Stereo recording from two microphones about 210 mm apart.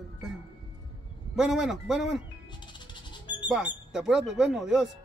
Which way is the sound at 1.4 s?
Centre (ahead or behind).